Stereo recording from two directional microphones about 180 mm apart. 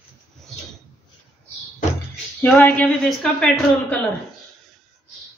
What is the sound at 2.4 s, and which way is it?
Speech, 10° left (ahead or behind).